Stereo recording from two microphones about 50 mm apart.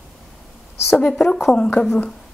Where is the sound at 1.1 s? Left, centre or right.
Centre.